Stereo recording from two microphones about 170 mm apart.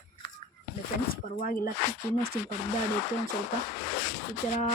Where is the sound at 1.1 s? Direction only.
55° left (ahead or behind).